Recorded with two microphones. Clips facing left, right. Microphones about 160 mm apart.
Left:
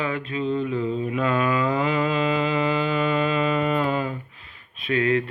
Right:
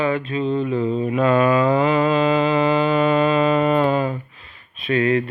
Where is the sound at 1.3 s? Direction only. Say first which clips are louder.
Right 7 dB; 30° right (ahead or behind).